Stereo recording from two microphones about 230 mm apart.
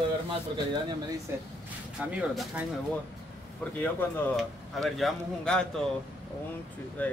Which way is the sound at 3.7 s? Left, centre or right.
Centre.